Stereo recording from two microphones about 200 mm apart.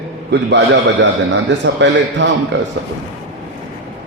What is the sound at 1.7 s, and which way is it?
Speech, 60° right (ahead or behind).